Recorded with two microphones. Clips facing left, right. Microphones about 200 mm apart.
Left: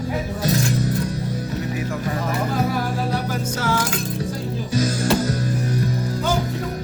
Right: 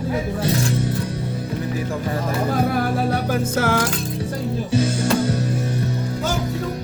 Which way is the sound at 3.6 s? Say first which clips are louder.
Right 1 dB; 55° right (ahead or behind).